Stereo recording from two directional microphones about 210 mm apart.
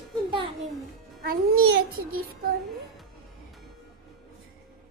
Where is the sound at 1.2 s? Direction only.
45° right (ahead or behind).